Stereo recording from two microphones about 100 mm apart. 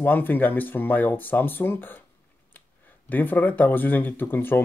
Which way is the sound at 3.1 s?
15° left (ahead or behind).